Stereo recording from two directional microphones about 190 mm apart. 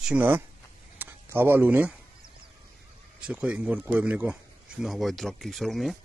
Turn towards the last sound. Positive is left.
turn(degrees=0)  # may be behind; listen again after turning